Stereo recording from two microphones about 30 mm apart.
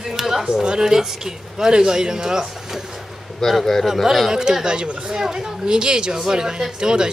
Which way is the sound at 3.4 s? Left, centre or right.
Centre.